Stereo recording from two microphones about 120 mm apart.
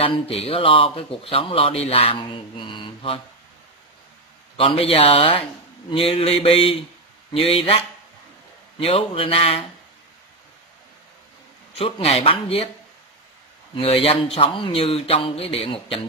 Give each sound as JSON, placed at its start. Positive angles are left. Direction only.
{"t": 0.0, "sound": "speech", "side_deg": 55}
{"t": 4.6, "sound": "speech", "side_deg": 50}
{"t": 11.7, "sound": "speech", "side_deg": 55}
{"t": 13.7, "sound": "speech", "side_deg": 55}